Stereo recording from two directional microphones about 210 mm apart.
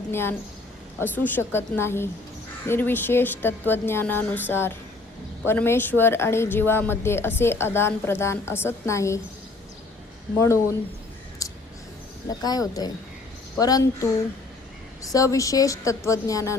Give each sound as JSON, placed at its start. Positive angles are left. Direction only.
{"t": 0.1, "sound": "speech", "side_deg": 10}
{"t": 10.3, "sound": "speech", "side_deg": 15}
{"t": 11.4, "sound": "a sound", "side_deg": 15}
{"t": 12.3, "sound": "speech", "side_deg": 20}